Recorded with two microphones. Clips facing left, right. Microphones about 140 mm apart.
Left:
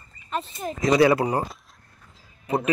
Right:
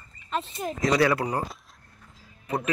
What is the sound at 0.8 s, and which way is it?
Speech, 20° left (ahead or behind).